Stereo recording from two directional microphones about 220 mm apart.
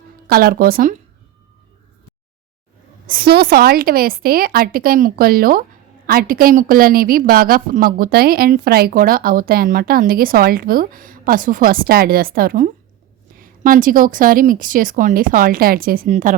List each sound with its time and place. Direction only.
0.3 s a woman's voice: 40° right (ahead or behind)
3.1 s a woman's voice: 45° right (ahead or behind)